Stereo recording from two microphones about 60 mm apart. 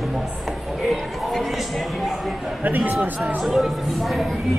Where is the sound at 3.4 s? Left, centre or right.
Centre.